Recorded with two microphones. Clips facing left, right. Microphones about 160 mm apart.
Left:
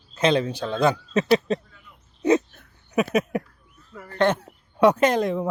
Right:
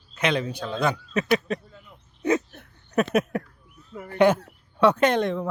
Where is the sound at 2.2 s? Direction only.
20° left (ahead or behind).